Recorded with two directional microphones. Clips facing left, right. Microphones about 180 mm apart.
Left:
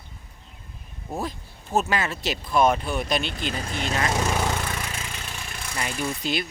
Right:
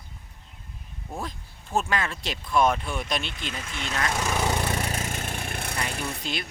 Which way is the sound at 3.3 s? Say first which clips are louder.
Left 6 dB; 35° left (ahead or behind).